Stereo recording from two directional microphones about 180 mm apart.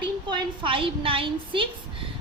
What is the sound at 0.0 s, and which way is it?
A woman's voice, 25° right (ahead or behind).